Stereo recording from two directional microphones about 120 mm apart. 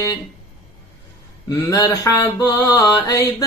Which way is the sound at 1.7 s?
35° left (ahead or behind).